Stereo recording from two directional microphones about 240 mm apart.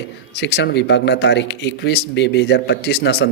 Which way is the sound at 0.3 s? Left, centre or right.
Left.